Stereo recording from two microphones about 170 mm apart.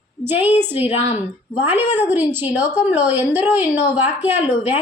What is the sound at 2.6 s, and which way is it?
Speech, 25° left (ahead or behind).